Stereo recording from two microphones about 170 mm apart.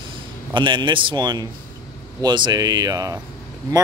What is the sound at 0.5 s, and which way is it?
Speech, 30° right (ahead or behind).